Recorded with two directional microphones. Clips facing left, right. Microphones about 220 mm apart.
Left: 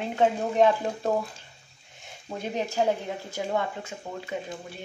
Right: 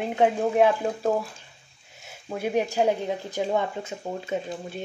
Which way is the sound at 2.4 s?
10° right (ahead or behind).